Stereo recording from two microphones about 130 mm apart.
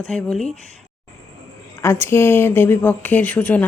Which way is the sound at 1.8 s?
20° left (ahead or behind).